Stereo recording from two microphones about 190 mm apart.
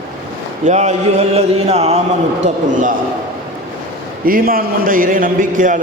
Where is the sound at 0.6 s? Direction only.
35° right (ahead or behind).